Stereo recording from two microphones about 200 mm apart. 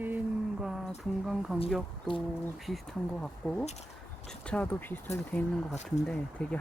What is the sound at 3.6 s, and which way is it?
Speech, 35° left (ahead or behind).